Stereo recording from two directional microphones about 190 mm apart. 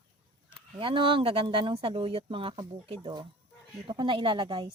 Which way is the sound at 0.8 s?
25° right (ahead or behind).